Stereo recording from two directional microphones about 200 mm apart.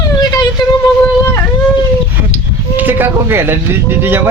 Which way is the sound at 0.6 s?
20° left (ahead or behind).